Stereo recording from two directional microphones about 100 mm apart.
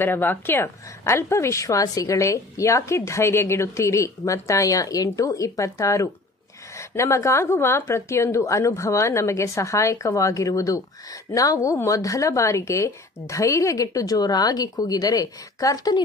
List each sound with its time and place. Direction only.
0.0 s a woman's voice: 20° left (ahead or behind); by 16.0 s 40° left (ahead or behind)